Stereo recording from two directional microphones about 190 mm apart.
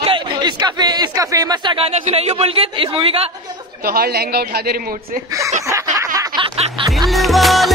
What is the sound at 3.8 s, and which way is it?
Speech, 55° right (ahead or behind).